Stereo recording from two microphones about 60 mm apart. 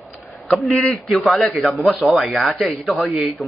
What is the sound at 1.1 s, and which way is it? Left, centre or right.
Speech, centre.